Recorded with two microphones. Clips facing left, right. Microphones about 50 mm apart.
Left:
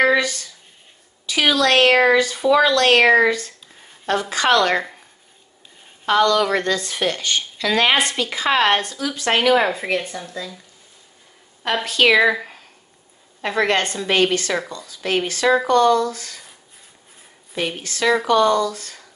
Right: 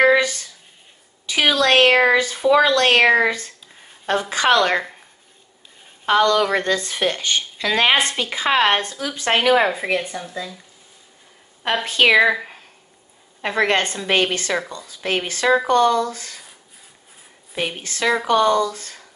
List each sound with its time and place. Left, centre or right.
0.0 s a sound: right
1.4 s a woman's voice: right
2.1 s a woman's voice: right
3.0 s speech: centre
3.3 s a woman's voice: right
6.0 s a woman's voice: right
9.7 s speech: centre
11.8 s a woman's voice: right
12.1 s a woman's voice: centre; by 16.3 s right
17.6 s a woman's voice: centre